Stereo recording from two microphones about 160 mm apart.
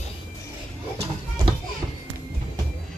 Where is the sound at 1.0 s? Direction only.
30° right (ahead or behind).